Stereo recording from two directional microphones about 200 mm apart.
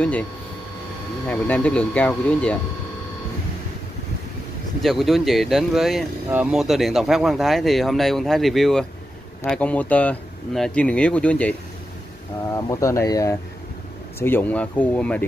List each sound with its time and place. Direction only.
1.2 s speech: 5° left (ahead or behind)
4.8 s speech: centre (ahead or behind)
12.5 s speech: 15° left (ahead or behind)